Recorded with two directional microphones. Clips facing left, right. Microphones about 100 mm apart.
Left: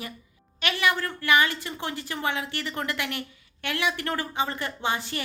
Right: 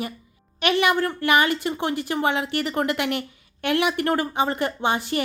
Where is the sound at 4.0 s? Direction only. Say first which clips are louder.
Right 8 dB; 55° right (ahead or behind).